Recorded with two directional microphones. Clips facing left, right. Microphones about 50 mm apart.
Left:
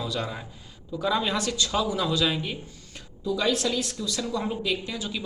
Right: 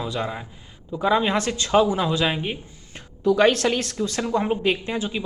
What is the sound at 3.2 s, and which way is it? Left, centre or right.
A woman's voice, right.